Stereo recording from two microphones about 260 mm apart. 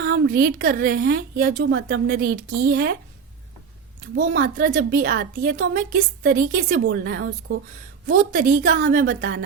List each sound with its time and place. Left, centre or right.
0.0 s a woman's voice: right
4.1 s a woman's voice: right